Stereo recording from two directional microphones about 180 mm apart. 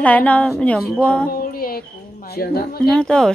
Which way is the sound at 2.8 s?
5° left (ahead or behind).